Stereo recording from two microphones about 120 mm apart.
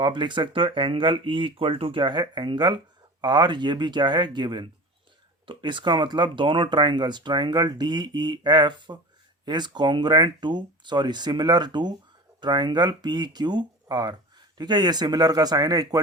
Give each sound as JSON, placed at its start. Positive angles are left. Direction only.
{"t": 0.0, "sound": "speech", "side_deg": -40}